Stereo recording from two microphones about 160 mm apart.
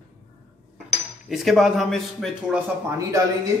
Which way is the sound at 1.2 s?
Centre (ahead or behind).